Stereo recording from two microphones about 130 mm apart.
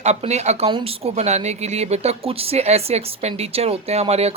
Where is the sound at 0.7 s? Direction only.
45° right (ahead or behind).